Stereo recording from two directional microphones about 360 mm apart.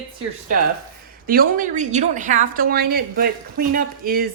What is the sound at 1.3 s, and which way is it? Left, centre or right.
A woman's voice, right.